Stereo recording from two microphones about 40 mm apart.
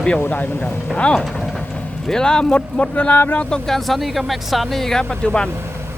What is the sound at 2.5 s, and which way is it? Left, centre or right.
Speech, left.